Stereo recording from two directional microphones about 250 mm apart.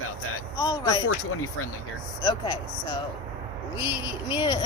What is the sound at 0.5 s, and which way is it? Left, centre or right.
Speech, centre.